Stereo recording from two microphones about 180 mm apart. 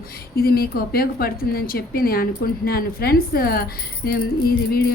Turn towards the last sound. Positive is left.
turn(degrees=55)  # may be behind; listen again after turning